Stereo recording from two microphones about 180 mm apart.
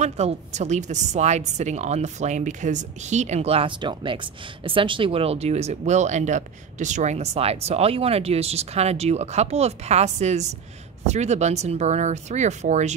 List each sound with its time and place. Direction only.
0.0 s a woman's voice: 40° right (ahead or behind)